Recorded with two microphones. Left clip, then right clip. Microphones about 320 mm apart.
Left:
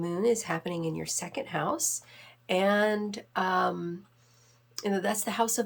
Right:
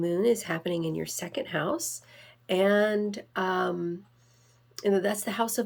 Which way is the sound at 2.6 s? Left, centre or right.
Centre.